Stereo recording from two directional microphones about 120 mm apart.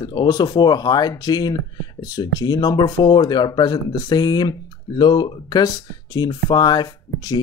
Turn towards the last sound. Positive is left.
turn(degrees=35)  # may be behind; listen again after turning